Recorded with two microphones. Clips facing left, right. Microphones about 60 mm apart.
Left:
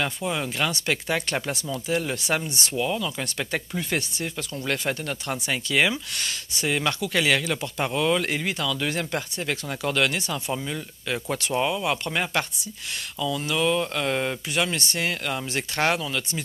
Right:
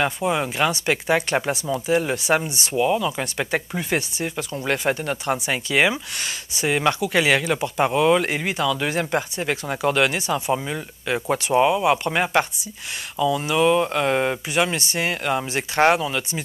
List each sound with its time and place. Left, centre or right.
0.0 s speech: centre